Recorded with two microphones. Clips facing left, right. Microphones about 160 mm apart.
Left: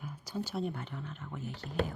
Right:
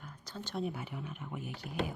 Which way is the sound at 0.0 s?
10° left (ahead or behind).